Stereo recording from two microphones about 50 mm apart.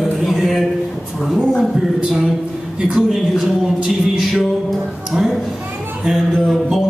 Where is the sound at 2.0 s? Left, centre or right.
Centre.